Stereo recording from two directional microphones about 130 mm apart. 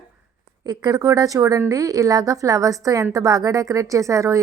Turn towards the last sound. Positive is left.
turn(degrees=-25)  # may be behind; listen again after turning